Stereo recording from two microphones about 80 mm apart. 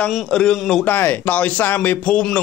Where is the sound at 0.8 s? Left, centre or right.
Left.